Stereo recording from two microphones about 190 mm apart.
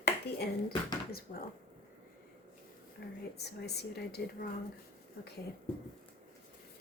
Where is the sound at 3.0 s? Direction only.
60° left (ahead or behind).